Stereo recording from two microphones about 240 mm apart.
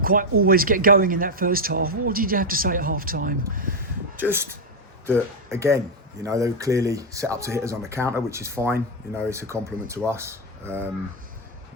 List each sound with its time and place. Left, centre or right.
0.0 s speech: right
4.2 s speech: centre